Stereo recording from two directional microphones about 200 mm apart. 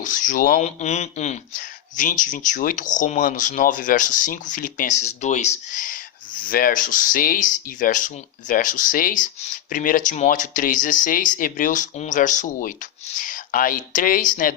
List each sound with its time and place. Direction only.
0.0 s speech: 40° left (ahead or behind)